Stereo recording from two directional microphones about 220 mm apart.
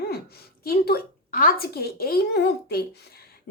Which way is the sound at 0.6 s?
45° left (ahead or behind).